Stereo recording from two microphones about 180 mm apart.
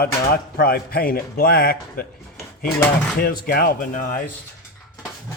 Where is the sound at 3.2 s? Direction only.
55° left (ahead or behind).